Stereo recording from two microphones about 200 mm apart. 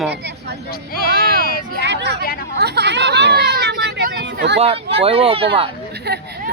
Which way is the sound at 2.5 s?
55° right (ahead or behind).